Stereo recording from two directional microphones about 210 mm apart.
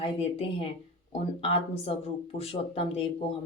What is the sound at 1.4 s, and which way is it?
Speech, 30° left (ahead or behind).